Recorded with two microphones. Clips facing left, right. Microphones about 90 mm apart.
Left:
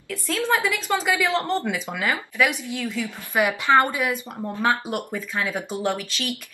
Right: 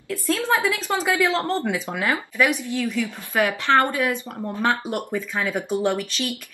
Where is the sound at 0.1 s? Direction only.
15° right (ahead or behind).